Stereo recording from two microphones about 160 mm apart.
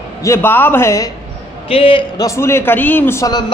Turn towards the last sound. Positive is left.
turn(degrees=25)  # may be behind; listen again after turning